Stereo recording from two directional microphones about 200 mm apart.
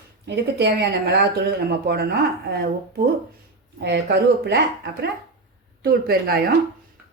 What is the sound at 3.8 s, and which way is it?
A woman's voice, 55° right (ahead or behind).